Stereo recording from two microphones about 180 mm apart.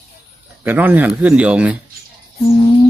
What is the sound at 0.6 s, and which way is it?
Speech, 10° right (ahead or behind).